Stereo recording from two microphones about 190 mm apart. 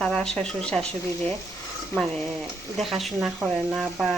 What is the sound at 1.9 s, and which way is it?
Speech, centre (ahead or behind).